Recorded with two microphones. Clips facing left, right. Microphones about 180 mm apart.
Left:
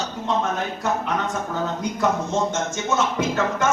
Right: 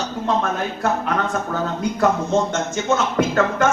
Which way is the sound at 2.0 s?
60° right (ahead or behind).